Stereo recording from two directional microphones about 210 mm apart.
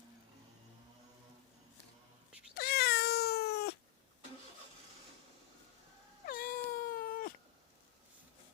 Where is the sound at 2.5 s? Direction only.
50° left (ahead or behind).